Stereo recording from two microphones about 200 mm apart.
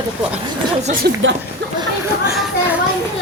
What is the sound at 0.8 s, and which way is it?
Speech, 45° right (ahead or behind).